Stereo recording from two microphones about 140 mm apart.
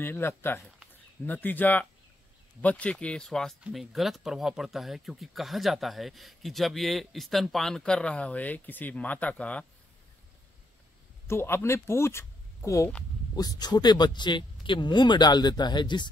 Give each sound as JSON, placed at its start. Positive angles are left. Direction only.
{"t": 0.0, "sound": "speech", "side_deg": 15}
{"t": 11.2, "sound": "speech", "side_deg": 20}